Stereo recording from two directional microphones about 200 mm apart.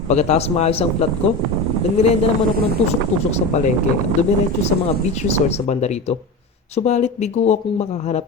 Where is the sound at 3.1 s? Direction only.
35° left (ahead or behind).